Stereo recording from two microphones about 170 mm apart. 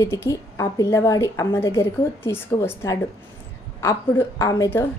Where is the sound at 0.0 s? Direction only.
15° left (ahead or behind).